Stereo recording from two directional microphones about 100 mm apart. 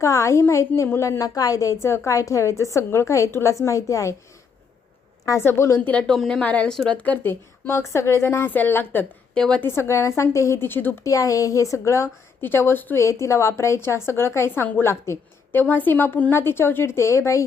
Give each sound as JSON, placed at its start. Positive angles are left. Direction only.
{"t": 0.0, "sound": "a woman's voice", "side_deg": 30}
{"t": 5.2, "sound": "a woman's voice", "side_deg": 30}
{"t": 5.9, "sound": "a woman's voice", "side_deg": 10}
{"t": 9.3, "sound": "speech", "side_deg": 10}
{"t": 9.6, "sound": "a woman's voice", "side_deg": 25}
{"t": 11.0, "sound": "a woman's voice", "side_deg": 35}